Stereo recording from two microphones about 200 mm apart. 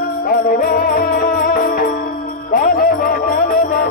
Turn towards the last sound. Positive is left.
turn(degrees=45)  # may be behind; listen again after turning